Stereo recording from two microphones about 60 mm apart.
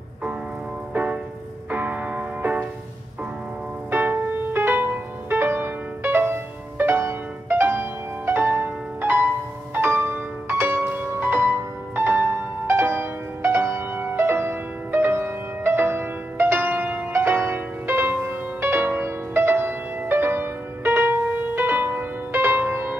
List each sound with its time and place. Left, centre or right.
0.9 s music: right
3.9 s music: right